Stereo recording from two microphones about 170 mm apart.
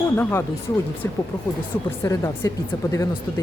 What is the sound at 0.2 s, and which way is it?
Speech, 15° left (ahead or behind).